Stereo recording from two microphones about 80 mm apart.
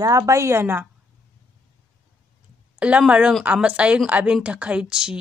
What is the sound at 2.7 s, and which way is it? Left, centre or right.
Speech, centre.